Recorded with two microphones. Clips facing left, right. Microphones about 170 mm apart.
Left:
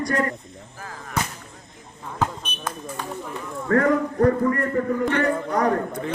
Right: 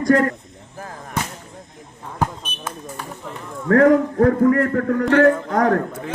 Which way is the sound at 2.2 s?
10° right (ahead or behind).